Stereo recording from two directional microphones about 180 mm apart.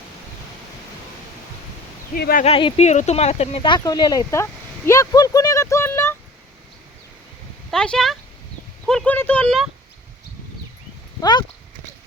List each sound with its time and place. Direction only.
2.1 s speech: 60° left (ahead or behind)
2.4 s speech: 30° left (ahead or behind)
4.9 s a sound: 20° left (ahead or behind)
7.7 s speech: 5° left (ahead or behind)
11.2 s speech: 25° left (ahead or behind)